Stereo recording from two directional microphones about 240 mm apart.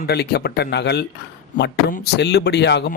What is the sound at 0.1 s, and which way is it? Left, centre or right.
Speech, left.